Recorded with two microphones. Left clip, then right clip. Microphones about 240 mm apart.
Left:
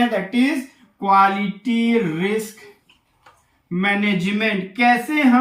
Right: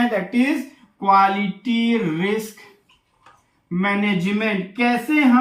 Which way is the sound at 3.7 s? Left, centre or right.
Centre.